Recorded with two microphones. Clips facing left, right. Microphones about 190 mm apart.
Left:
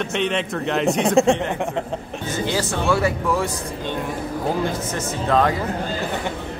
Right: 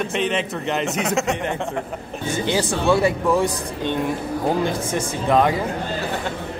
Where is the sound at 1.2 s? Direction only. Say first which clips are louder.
Left 9 dB; 30° left (ahead or behind).